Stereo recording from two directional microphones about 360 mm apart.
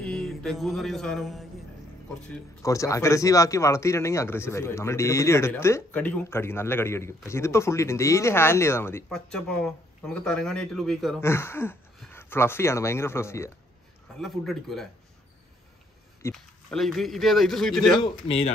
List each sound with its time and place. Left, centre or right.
0.0 s mantra: centre
2.6 s speech: centre
16.2 s speech: centre
18.0 s speech: centre